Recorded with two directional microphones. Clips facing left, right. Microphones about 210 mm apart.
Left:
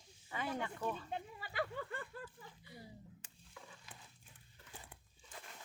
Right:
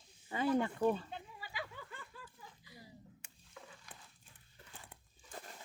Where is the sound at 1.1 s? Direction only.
55° left (ahead or behind).